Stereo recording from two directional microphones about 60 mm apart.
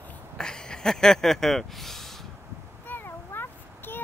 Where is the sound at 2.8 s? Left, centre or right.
Left.